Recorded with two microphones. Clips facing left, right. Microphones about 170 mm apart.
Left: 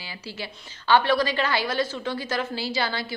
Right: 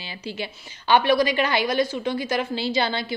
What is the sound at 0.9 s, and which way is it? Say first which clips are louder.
A woman's voice: right 2 dB; 15° right (ahead or behind).